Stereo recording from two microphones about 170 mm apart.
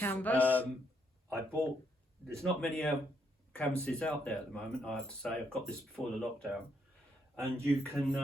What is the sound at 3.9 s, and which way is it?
Speech, 5° left (ahead or behind).